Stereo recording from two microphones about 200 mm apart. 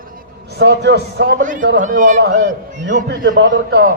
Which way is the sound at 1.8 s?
40° right (ahead or behind).